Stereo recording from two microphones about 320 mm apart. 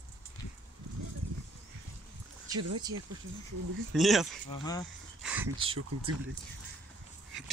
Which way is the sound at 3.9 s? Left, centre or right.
Centre.